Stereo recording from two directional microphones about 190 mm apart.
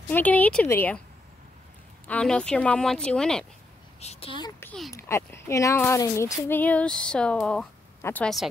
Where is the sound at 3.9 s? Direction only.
30° left (ahead or behind).